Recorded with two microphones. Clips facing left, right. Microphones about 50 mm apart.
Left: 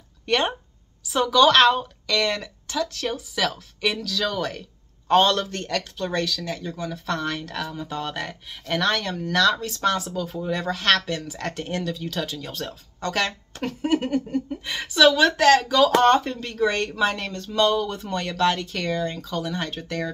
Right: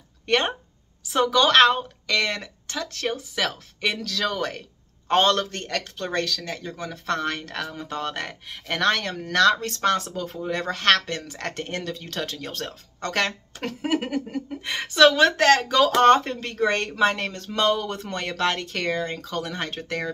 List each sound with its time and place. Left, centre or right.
0.3 s a woman's voice: right
4.0 s speech: right
4.3 s a man's voice: right
6.1 s speech: right
7.9 s speech: right
12.3 s speech: right
13.7 s a sound: right
14.6 s speech: right
17.3 s speech: right